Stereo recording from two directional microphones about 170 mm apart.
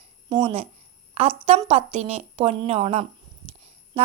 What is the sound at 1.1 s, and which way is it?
A woman's voice, 35° right (ahead or behind).